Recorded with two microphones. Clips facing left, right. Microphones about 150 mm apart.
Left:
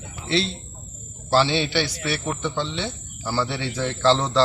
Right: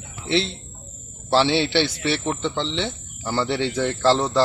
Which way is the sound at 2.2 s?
20° right (ahead or behind).